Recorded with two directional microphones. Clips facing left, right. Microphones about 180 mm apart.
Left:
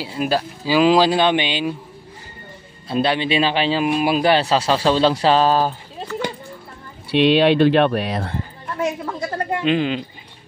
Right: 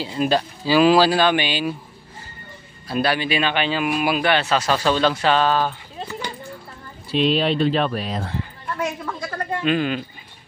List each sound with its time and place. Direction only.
0.0 s speech: 10° left (ahead or behind)
2.9 s speech: 25° left (ahead or behind)
7.1 s speech: 75° left (ahead or behind)
8.7 s speech: 25° left (ahead or behind)